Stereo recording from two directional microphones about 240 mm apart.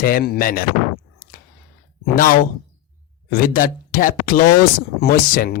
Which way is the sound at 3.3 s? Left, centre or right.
Left.